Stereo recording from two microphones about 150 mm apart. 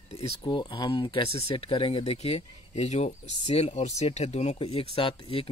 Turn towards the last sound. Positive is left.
turn(degrees=35)  # may be behind; listen again after turning